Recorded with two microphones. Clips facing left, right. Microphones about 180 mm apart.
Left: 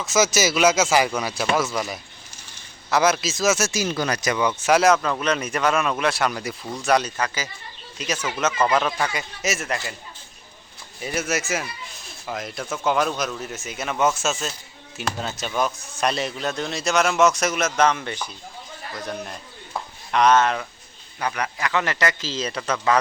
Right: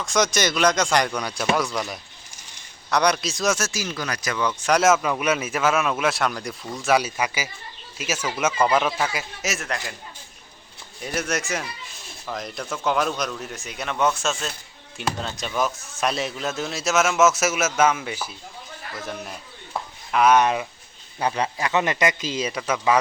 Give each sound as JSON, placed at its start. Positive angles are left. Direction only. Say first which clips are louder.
{"t": 0.0, "sound": "speech", "louder": "left 2 dB", "side_deg": 5}
{"t": 3.7, "sound": "speech", "louder": "left 5 dB", "side_deg": 25}
{"t": 11.0, "sound": "a man's voice", "louder": "left 1 dB", "side_deg": 5}
{"t": 21.2, "sound": "a man's voice", "louder": "right 2 dB", "side_deg": -25}